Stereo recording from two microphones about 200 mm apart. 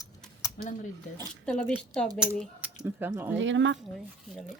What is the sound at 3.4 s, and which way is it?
Speech, 70° right (ahead or behind).